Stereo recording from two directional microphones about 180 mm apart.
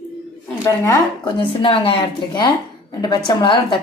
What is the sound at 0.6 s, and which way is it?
Speech, 15° left (ahead or behind).